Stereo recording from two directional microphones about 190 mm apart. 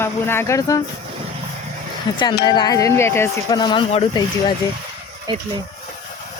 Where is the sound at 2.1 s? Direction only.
25° left (ahead or behind).